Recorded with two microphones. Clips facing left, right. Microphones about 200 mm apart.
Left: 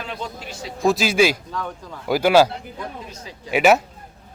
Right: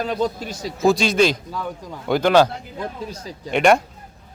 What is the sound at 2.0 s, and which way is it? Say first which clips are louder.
Speech: even; 5° left (ahead or behind).